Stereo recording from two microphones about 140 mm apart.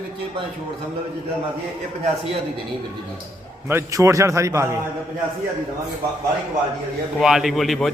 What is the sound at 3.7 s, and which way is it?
Speech, 20° right (ahead or behind).